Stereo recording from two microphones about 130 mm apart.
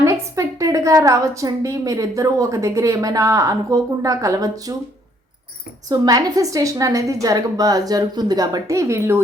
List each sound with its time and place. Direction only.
0.0 s a woman's voice: 25° right (ahead or behind)
5.9 s a woman's voice: 30° right (ahead or behind)